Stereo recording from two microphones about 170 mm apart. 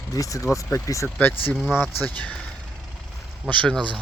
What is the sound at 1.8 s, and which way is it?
Speech, 10° left (ahead or behind).